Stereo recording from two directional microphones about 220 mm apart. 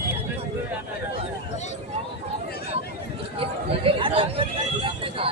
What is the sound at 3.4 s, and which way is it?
Speech, 25° right (ahead or behind).